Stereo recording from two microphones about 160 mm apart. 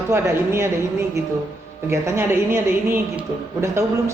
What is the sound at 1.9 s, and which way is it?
A woman's voice, 15° right (ahead or behind).